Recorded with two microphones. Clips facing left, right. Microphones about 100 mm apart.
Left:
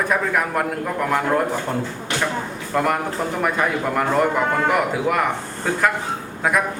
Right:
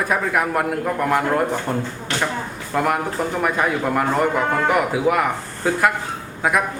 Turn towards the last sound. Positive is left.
turn(degrees=0)  # may be behind; listen again after turning